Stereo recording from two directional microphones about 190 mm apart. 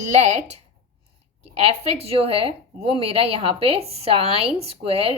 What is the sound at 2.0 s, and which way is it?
A woman's voice, 30° right (ahead or behind).